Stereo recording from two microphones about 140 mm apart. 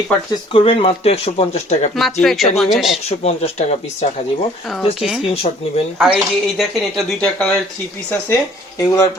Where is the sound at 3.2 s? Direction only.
50° left (ahead or behind).